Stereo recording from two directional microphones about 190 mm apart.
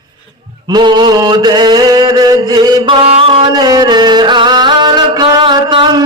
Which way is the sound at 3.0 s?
30° right (ahead or behind).